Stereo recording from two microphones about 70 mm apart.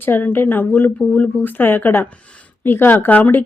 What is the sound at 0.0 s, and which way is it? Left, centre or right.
Speech, left.